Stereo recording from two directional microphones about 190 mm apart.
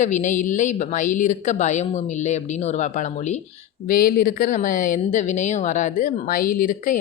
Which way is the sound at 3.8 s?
50° left (ahead or behind).